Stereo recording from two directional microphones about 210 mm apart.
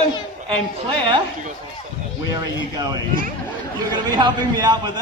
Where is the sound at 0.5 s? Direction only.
25° right (ahead or behind).